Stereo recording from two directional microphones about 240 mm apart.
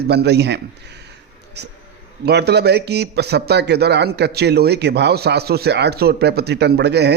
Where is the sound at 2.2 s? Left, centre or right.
Right.